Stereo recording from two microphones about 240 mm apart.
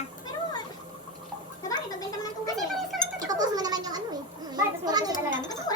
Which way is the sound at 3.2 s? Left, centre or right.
Centre.